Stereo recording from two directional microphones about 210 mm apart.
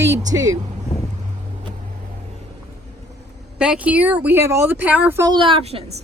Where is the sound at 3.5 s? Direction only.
5° right (ahead or behind); by 5.8 s 30° right (ahead or behind).